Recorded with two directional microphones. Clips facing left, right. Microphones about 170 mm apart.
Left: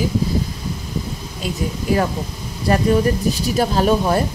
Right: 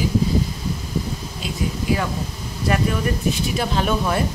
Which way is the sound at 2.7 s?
35° left (ahead or behind).